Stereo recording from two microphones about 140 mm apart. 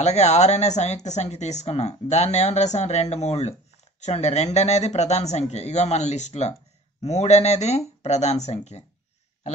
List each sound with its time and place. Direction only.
0.0 s speech: 50° left (ahead or behind)